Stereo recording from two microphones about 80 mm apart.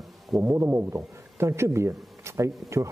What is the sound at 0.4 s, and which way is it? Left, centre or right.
Speech, right.